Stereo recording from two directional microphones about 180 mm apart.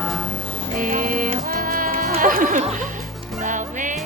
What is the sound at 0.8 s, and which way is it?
Music, 50° right (ahead or behind).